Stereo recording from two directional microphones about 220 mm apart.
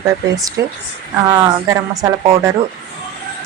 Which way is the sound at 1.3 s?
15° right (ahead or behind).